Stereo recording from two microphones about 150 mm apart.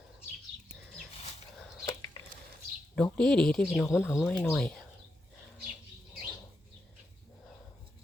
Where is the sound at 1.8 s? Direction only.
20° left (ahead or behind).